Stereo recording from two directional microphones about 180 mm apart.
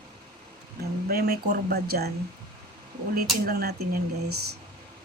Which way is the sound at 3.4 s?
60° right (ahead or behind).